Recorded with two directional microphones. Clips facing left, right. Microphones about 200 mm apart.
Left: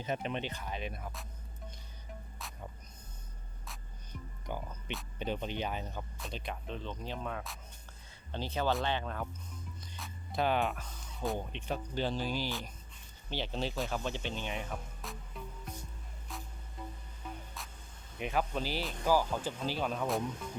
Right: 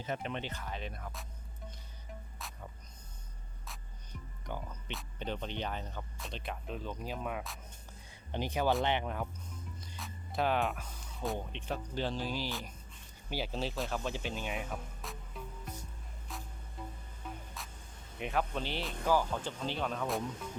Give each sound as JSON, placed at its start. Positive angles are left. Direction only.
{"t": 0.0, "sound": "speech", "side_deg": 20}
{"t": 2.4, "sound": "music", "side_deg": 0}
{"t": 4.5, "sound": "speech", "side_deg": 10}
{"t": 6.1, "sound": "speech", "side_deg": 0}
{"t": 8.3, "sound": "speech", "side_deg": -15}
{"t": 9.8, "sound": "speech", "side_deg": 0}
{"t": 16.3, "sound": "music", "side_deg": 0}
{"t": 18.2, "sound": "speech", "side_deg": 0}